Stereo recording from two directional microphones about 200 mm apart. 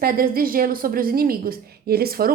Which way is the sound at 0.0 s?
45° right (ahead or behind).